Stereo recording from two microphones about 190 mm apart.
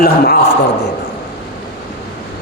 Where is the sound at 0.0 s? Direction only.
55° left (ahead or behind).